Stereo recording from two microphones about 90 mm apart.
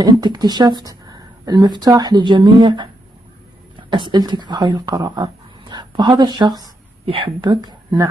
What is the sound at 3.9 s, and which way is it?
Speech, 60° right (ahead or behind).